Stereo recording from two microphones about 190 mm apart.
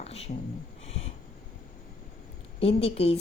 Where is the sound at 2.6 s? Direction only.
30° left (ahead or behind).